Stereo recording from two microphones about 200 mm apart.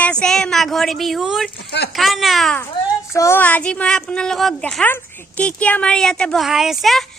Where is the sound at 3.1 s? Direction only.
15° left (ahead or behind).